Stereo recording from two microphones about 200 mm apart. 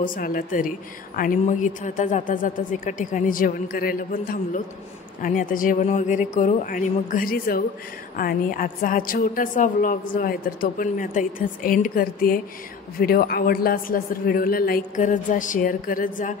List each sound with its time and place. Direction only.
0.0 s a woman's voice: 45° left (ahead or behind)